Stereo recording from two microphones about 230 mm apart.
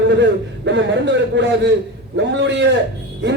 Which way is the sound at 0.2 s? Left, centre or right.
Right.